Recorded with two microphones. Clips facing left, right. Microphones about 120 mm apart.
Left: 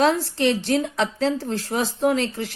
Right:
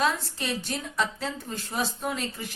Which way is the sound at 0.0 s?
70° left (ahead or behind).